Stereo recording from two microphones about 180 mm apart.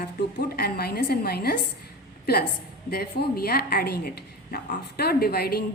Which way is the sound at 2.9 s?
55° left (ahead or behind).